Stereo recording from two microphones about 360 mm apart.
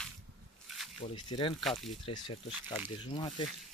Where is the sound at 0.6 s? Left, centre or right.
Centre.